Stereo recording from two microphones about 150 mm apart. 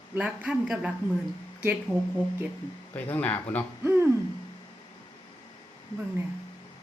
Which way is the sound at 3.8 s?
15° right (ahead or behind).